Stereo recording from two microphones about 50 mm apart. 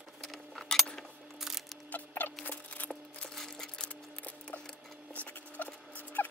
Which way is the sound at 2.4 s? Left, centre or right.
Left.